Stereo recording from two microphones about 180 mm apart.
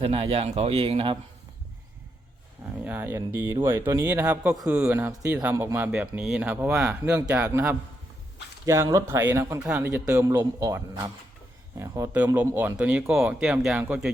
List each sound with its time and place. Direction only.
0.0 s speech: 30° right (ahead or behind)
2.8 s speech: 10° right (ahead or behind)